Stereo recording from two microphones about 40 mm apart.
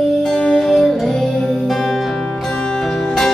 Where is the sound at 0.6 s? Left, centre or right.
Centre.